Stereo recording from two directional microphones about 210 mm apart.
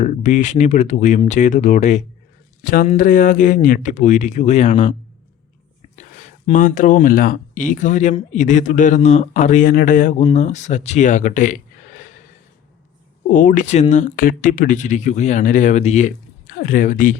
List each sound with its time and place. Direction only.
0.0 s speech: 35° left (ahead or behind)
6.0 s speech: 35° left (ahead or behind)
13.3 s speech: 40° left (ahead or behind)